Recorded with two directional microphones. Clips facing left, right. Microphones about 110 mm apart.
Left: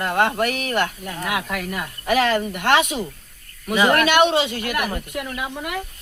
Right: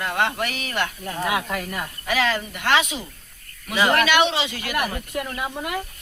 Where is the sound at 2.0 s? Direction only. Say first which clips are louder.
Left 5 dB; 50° left (ahead or behind).